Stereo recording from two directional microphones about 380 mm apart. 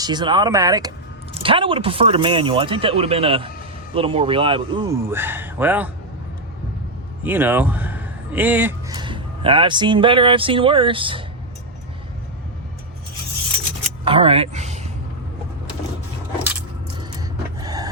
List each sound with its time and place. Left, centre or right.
0.0 s speech: centre
7.2 s speech: centre
14.0 s speech: centre
17.0 s a sound: centre